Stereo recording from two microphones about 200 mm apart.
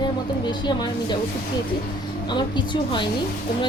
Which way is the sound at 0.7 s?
20° left (ahead or behind).